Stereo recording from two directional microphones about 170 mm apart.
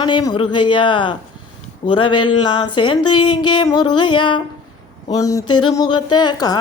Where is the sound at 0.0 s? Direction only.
25° left (ahead or behind).